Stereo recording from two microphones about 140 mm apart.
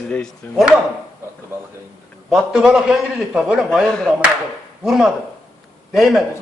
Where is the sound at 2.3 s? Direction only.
5° right (ahead or behind).